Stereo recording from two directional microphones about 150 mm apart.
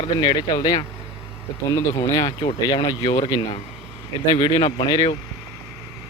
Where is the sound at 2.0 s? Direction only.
25° left (ahead or behind).